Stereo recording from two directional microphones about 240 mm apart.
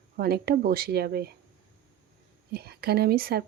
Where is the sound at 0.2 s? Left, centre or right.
Right.